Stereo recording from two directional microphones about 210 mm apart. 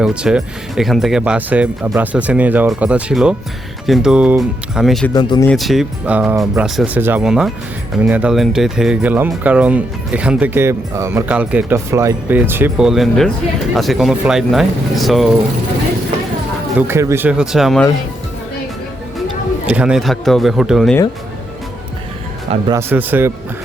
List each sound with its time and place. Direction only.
0.0 s speech: 5° right (ahead or behind)
5.1 s speech: 20° left (ahead or behind)
5.5 s speech: centre (ahead or behind)
16.7 s speech: 10° right (ahead or behind)
19.6 s speech: 5° right (ahead or behind)
22.7 s speech: 10° right (ahead or behind)